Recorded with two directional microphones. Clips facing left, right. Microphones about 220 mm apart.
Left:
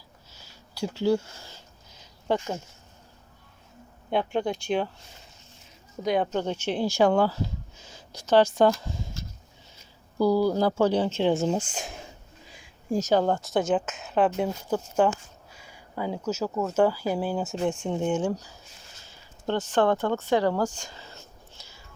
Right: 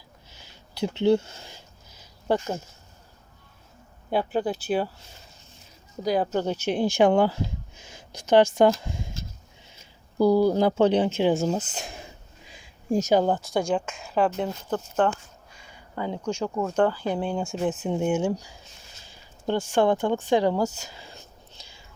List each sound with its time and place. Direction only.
0.3 s a sound: 20° right (ahead or behind)
4.1 s speech: 5° right (ahead or behind)
6.0 s speech: centre (ahead or behind); by 7.3 s 15° right (ahead or behind)
8.5 s speech: 15° right (ahead or behind)
10.2 s speech: 20° right (ahead or behind); by 11.5 s 5° right (ahead or behind)
13.0 s speech: 10° right (ahead or behind)
19.0 s a sound: 10° right (ahead or behind)